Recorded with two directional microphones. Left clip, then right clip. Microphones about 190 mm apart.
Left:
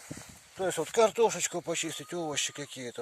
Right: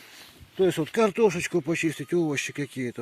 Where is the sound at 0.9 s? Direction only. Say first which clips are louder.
Left 2 dB; 40° left (ahead or behind).